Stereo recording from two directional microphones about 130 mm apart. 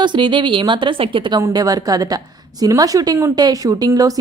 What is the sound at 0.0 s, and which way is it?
A woman's voice, 35° right (ahead or behind).